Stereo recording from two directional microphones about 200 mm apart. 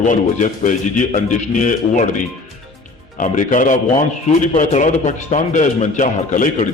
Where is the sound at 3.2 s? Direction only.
40° left (ahead or behind).